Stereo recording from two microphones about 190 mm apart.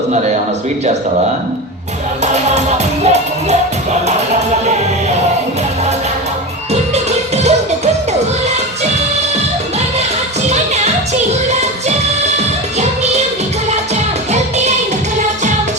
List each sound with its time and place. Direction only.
2.2 s music: 35° right (ahead or behind)
6.9 s music: 35° right (ahead or behind)
10.5 s music: 35° right (ahead or behind)